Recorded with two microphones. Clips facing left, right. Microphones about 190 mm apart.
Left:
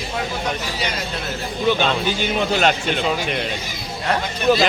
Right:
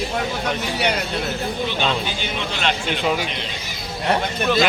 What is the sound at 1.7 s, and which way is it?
Speech, 50° left (ahead or behind).